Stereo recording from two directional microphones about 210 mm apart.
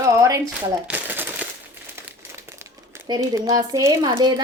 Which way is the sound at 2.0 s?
10° right (ahead or behind).